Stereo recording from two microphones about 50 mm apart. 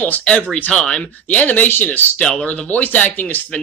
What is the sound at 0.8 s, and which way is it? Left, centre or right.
Speech, centre.